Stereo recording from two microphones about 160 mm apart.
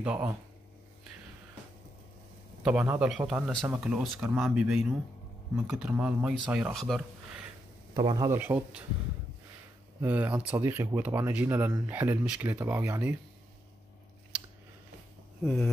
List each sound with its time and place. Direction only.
0.0 s speech: 10° right (ahead or behind)
2.6 s speech: 10° right (ahead or behind)
7.9 s speech: 30° right (ahead or behind)
8.3 s speech: 15° right (ahead or behind)
10.0 s speech: 10° right (ahead or behind)
15.4 s speech: 5° left (ahead or behind)